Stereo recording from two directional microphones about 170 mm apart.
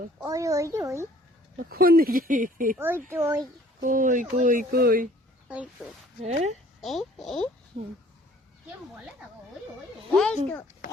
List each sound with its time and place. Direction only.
0.2 s a child's voice: 20° right (ahead or behind)
1.7 s speech: 60° right (ahead or behind)
2.7 s a child's voice: 10° right (ahead or behind)
3.8 s speech: 50° right (ahead or behind)
5.8 s speech: centre (ahead or behind)
6.2 s speech: 40° right (ahead or behind)
6.8 s speech: centre (ahead or behind)
10.2 s speech: 5° left (ahead or behind)